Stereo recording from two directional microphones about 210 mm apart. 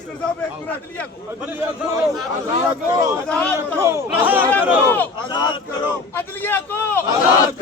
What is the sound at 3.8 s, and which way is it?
Speech, 15° right (ahead or behind).